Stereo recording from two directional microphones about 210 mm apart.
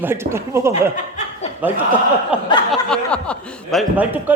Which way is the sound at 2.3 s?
5° right (ahead or behind).